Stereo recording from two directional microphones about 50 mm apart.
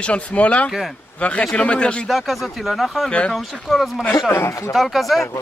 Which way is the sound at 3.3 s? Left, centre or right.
Centre.